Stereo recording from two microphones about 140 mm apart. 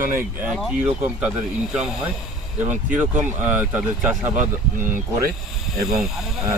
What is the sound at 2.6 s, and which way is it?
Speech, 10° right (ahead or behind).